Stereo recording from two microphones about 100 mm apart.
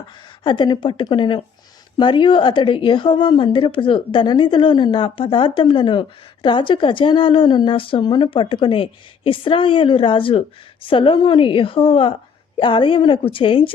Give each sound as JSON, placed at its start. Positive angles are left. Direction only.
{"t": 0.4, "sound": "a woman's voice", "side_deg": 50}
{"t": 8.0, "sound": "a woman's voice", "side_deg": 45}
{"t": 8.3, "sound": "a woman's voice", "side_deg": 60}